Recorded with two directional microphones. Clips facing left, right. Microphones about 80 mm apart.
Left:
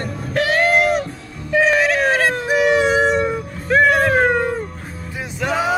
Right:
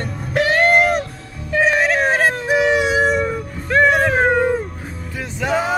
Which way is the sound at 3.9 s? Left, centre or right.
Centre.